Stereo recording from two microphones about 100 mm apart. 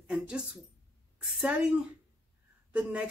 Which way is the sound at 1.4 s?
10° right (ahead or behind).